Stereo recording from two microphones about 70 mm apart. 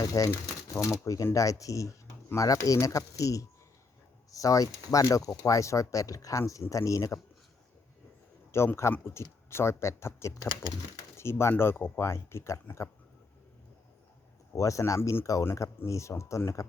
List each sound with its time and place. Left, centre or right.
0.0 s speech: left
8.5 s speech: left
14.5 s speech: left